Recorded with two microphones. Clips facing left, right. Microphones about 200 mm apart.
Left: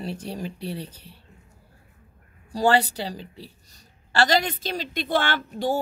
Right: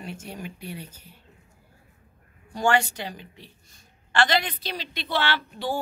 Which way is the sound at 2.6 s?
35° left (ahead or behind).